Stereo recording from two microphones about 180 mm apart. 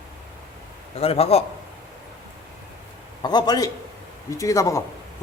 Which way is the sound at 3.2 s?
25° left (ahead or behind).